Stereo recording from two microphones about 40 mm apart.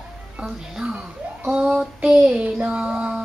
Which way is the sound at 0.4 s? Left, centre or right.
Right.